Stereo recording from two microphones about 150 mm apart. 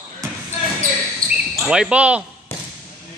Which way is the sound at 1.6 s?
5° right (ahead or behind).